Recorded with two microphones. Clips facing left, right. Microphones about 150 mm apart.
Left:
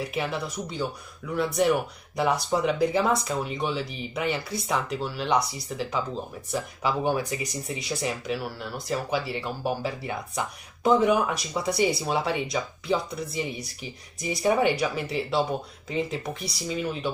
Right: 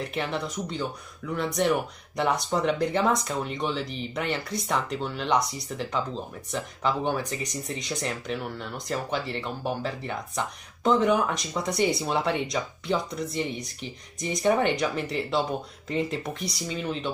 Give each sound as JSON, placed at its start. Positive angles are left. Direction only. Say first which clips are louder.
{"t": 0.0, "sound": "speech", "louder": "even", "side_deg": 5}